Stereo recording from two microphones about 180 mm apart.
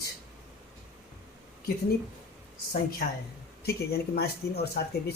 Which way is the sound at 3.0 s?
60° left (ahead or behind).